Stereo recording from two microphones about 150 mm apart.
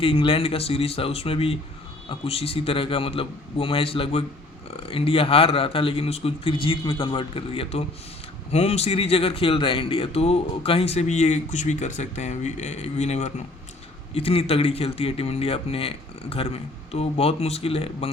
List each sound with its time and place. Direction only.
0.0 s speech: 40° left (ahead or behind)